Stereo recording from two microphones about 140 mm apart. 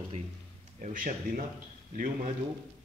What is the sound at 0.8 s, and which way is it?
Speech, 70° right (ahead or behind).